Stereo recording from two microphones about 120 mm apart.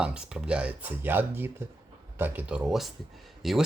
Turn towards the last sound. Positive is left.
turn(degrees=0)  # may be behind; listen again after turning